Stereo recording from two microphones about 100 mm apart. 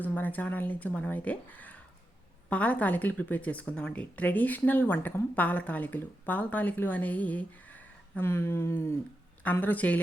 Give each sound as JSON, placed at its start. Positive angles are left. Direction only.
{"t": 0.0, "sound": "speech", "side_deg": 15}